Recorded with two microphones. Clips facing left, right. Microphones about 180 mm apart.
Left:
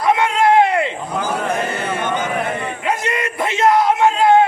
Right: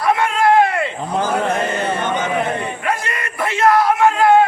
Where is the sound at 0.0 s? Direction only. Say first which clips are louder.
Left 1 dB; 20° left (ahead or behind).